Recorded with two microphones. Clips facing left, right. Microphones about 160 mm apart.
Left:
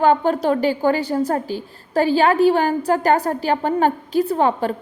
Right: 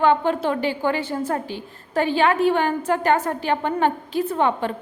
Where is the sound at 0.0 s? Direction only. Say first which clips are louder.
Left 2 dB; 40° left (ahead or behind).